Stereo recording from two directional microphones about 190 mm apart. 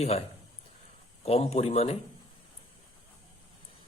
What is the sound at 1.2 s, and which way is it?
Speech, 30° left (ahead or behind).